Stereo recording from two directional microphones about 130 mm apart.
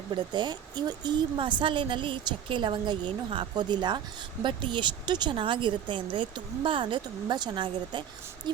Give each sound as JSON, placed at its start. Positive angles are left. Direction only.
{"t": 0.1, "sound": "a woman's voice", "side_deg": -35}